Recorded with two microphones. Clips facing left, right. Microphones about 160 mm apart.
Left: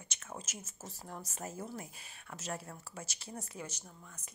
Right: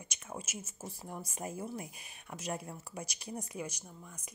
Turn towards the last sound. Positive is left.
turn(degrees=-15)  # may be behind; listen again after turning